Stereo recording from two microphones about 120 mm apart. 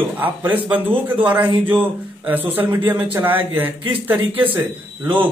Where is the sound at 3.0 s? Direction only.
15° right (ahead or behind).